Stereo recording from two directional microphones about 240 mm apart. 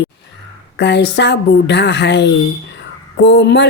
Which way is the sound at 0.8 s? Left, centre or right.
Left.